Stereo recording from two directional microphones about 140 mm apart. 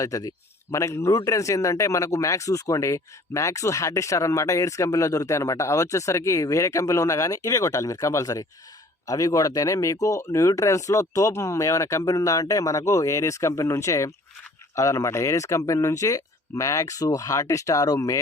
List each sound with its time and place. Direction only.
0.0 s a man's voice: 25° left (ahead or behind)